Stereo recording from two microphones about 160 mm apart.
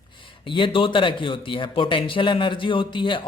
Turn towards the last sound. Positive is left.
turn(degrees=30)  # may be behind; listen again after turning